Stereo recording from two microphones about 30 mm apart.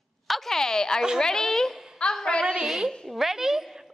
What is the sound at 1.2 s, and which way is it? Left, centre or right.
Speech, centre.